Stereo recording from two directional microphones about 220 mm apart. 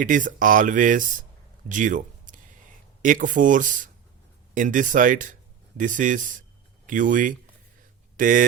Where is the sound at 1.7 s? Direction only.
35° right (ahead or behind).